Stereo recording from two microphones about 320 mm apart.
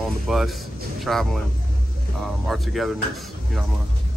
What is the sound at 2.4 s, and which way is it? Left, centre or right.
Speech, centre.